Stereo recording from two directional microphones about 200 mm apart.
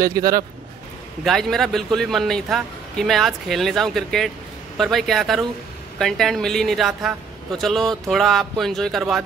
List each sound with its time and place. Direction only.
0.0 s speech: 20° right (ahead or behind)
1.2 s a woman's voice: centre (ahead or behind)